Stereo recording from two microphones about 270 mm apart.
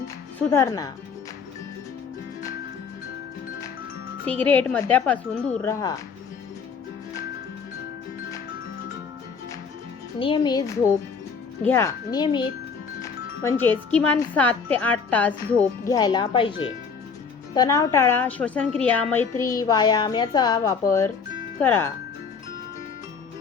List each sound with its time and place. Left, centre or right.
0.3 s a woman's voice: centre
4.4 s a woman's voice: centre
10.2 s a woman's voice: centre
11.6 s a woman's voice: centre
13.6 s a woman's voice: centre